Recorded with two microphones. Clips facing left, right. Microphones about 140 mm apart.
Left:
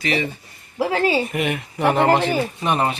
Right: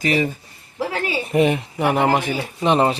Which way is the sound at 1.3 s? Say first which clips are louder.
Right 6 dB; 30° right (ahead or behind).